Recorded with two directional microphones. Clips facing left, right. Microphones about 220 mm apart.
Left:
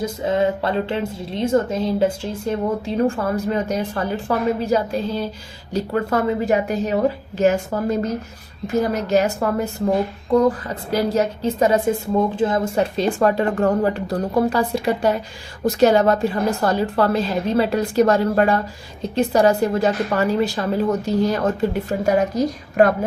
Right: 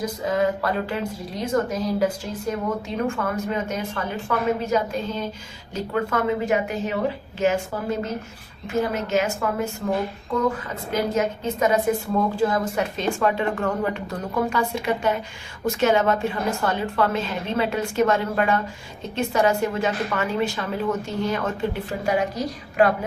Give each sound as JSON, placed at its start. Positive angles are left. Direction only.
{"t": 0.3, "sound": "a woman's voice", "side_deg": 25}
{"t": 12.1, "sound": "a woman's voice", "side_deg": 20}